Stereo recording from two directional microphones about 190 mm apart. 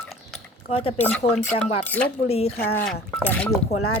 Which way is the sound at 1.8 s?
10° left (ahead or behind).